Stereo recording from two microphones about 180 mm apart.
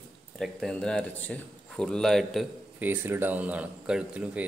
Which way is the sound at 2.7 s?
10° right (ahead or behind).